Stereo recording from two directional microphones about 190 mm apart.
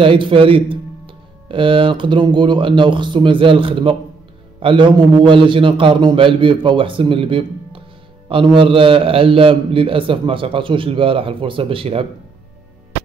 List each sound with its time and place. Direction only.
0.0 s speech: 25° right (ahead or behind)